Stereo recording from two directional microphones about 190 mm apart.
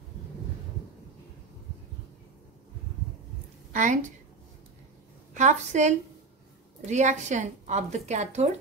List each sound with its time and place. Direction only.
3.7 s a woman's voice: 40° right (ahead or behind)
5.3 s a woman's voice: 40° right (ahead or behind)